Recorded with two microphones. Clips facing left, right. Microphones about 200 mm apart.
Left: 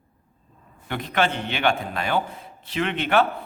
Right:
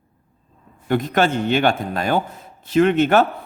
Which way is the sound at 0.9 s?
45° right (ahead or behind).